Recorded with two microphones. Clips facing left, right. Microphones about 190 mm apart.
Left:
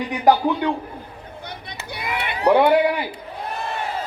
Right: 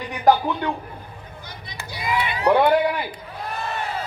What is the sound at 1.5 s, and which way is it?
Run, 60° left (ahead or behind).